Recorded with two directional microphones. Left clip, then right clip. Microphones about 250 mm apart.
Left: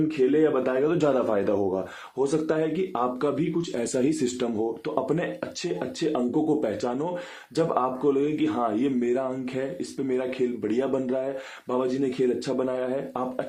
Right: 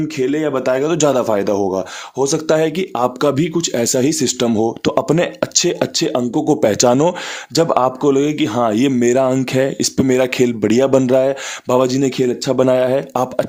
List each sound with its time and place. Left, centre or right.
0.2 s speech: right